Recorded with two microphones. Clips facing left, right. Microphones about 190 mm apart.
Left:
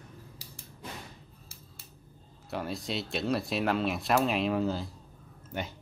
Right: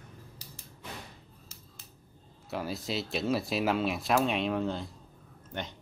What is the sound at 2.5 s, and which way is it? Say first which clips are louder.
Speech: even; centre (ahead or behind).